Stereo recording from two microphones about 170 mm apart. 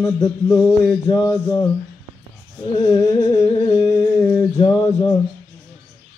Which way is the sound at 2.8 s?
20° left (ahead or behind).